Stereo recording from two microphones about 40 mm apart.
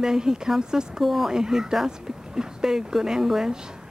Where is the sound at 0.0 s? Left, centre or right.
Centre.